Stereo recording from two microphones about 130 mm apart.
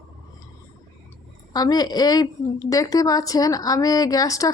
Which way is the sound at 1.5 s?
30° left (ahead or behind).